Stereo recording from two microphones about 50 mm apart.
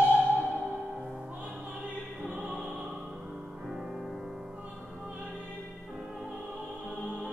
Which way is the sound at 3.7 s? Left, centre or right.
Centre.